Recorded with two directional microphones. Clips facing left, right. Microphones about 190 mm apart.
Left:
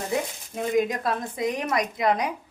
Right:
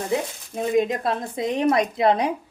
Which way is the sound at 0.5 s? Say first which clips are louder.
Right 3 dB; 25° right (ahead or behind).